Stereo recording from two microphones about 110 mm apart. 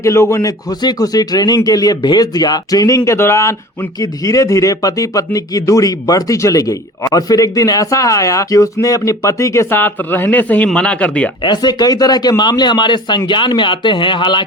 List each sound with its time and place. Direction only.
0.0 s speech: 25° left (ahead or behind)
0.7 s speech: 40° left (ahead or behind); by 11.3 s 10° left (ahead or behind)
11.4 s speech: 40° left (ahead or behind)